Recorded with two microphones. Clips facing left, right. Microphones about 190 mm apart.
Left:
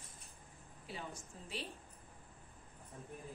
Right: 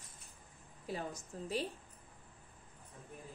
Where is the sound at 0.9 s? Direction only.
45° right (ahead or behind).